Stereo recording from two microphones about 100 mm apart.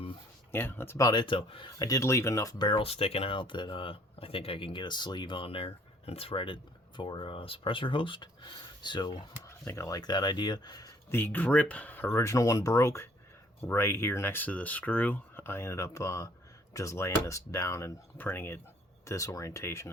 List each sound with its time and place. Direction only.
0.5 s speech: 20° left (ahead or behind)
1.0 s speech: 50° left (ahead or behind)
1.8 s speech: 35° left (ahead or behind)
2.6 s speech: 70° left (ahead or behind); by 9.2 s 50° left (ahead or behind)
9.5 s speech: 30° left (ahead or behind)
11.1 s speech: 20° left (ahead or behind)